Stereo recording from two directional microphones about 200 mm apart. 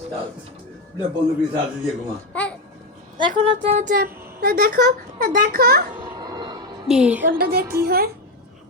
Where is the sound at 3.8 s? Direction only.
45° right (ahead or behind).